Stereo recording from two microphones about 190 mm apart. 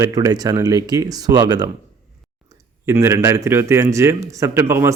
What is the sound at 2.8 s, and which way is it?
Speech, 15° right (ahead or behind).